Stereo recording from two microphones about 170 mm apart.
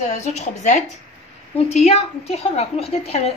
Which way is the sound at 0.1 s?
40° left (ahead or behind).